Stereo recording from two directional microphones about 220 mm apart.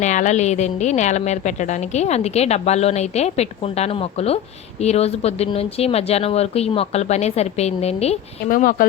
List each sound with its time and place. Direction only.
0.0 s a woman's voice: 35° left (ahead or behind)